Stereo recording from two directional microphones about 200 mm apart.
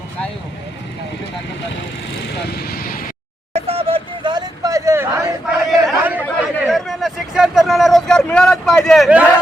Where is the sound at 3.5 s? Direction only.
30° right (ahead or behind); by 5.2 s 15° right (ahead or behind).